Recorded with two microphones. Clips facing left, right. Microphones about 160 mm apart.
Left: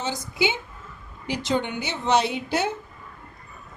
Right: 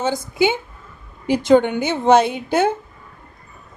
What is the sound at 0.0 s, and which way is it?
Speech, 50° right (ahead or behind).